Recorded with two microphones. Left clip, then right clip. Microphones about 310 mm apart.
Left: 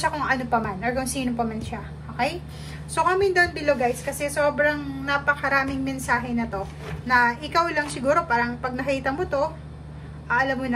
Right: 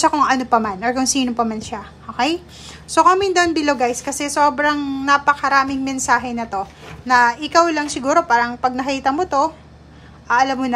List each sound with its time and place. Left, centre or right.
0.0 s a woman's voice: centre